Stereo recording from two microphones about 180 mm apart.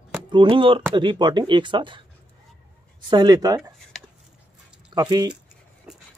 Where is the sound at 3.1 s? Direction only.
25° right (ahead or behind).